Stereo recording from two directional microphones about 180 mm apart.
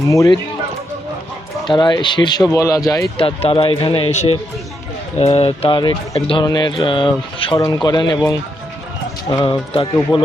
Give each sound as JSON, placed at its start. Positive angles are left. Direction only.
{"t": 0.1, "sound": "a man's voice", "side_deg": 15}
{"t": 1.6, "sound": "speech", "side_deg": 25}
{"t": 3.2, "sound": "speech", "side_deg": 30}
{"t": 9.3, "sound": "speech", "side_deg": 25}
{"t": 10.1, "sound": "speech", "side_deg": 0}